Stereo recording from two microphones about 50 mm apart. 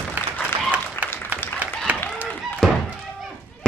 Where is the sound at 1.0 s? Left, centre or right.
Right.